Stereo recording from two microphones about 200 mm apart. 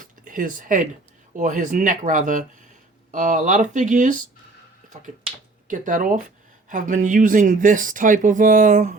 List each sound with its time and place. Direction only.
0.0 s a sound: 40° right (ahead or behind)
1.4 s speech: 40° right (ahead or behind)
5.6 s speech: 40° right (ahead or behind)